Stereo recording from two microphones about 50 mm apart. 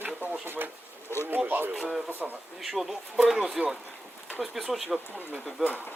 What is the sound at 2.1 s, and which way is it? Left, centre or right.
Speech, right.